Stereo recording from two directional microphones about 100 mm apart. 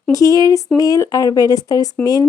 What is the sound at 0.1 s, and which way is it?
Speech, 35° left (ahead or behind).